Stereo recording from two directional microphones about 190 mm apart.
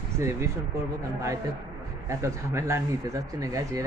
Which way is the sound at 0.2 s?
15° right (ahead or behind).